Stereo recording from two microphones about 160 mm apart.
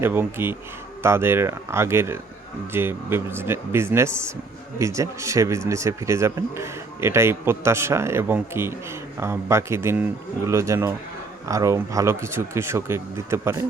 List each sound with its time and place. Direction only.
0.0 s speech: 15° right (ahead or behind)